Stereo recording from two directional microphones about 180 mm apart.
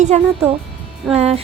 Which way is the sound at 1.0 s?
Centre (ahead or behind).